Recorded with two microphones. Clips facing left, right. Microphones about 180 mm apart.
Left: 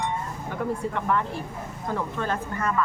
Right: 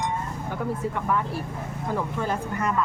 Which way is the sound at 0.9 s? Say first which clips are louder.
Even; 5° right (ahead or behind).